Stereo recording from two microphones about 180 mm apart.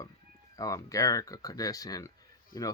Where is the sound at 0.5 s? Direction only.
20° left (ahead or behind).